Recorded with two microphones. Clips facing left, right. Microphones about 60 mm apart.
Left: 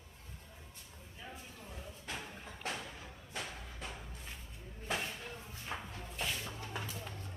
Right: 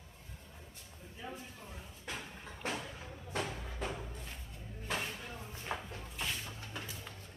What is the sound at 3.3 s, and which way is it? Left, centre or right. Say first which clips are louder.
Music: right 6 dB; right.